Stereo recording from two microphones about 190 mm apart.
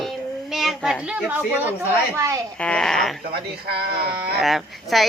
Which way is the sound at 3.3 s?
55° right (ahead or behind).